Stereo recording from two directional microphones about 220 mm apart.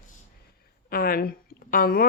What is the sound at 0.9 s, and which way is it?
Speech, 40° left (ahead or behind).